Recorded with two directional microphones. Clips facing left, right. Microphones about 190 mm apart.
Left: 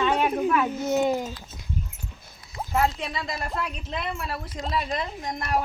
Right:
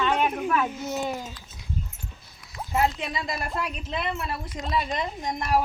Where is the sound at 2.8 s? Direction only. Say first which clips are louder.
Even; centre (ahead or behind).